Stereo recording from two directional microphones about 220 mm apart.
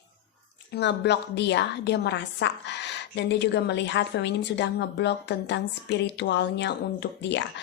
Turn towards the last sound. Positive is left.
turn(degrees=50)  # may be behind; listen again after turning